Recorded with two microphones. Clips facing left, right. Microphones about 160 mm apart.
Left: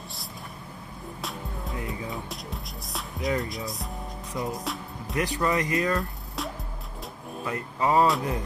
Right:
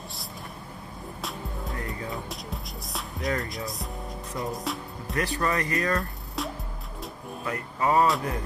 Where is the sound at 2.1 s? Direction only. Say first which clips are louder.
Right 1 dB; centre (ahead or behind).